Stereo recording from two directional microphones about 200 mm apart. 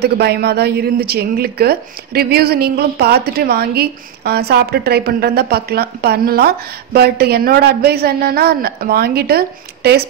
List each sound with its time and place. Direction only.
0.0 s a woman's voice: 55° right (ahead or behind)